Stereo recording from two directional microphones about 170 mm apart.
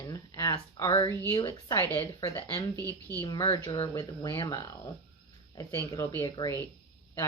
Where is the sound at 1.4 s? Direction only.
25° left (ahead or behind).